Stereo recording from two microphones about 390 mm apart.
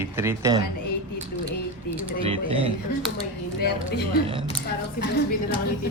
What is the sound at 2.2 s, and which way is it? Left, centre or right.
Speech, centre.